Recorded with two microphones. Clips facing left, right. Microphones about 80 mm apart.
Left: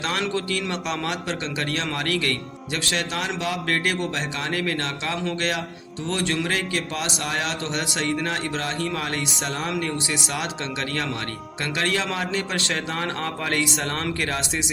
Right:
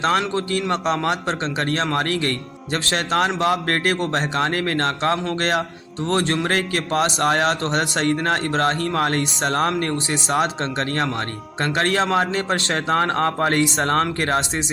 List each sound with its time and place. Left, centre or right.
0.0 s a man's voice: right